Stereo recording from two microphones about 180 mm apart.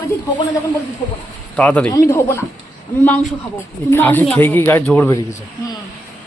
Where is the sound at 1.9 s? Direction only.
15° left (ahead or behind).